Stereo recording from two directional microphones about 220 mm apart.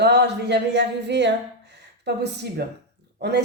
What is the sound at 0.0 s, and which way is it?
Speech, 50° right (ahead or behind).